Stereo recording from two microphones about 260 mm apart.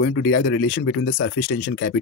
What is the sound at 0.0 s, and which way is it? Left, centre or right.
Speech, left.